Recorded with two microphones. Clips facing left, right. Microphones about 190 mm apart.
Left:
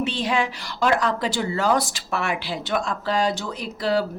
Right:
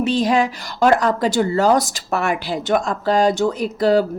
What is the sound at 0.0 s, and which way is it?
Speech, 40° right (ahead or behind).